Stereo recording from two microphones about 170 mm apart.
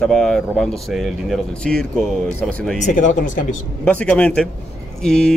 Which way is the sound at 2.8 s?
50° left (ahead or behind).